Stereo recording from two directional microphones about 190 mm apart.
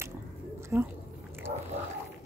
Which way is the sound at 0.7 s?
10° right (ahead or behind).